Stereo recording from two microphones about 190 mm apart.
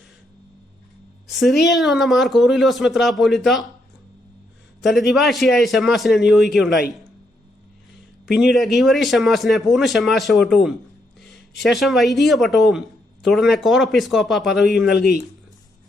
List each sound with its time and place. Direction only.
1.3 s speech: centre (ahead or behind)
4.8 s speech: centre (ahead or behind)
8.4 s speech: centre (ahead or behind)
14.8 s speech: 60° left (ahead or behind)